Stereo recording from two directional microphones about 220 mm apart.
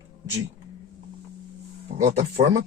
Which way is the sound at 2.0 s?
30° right (ahead or behind).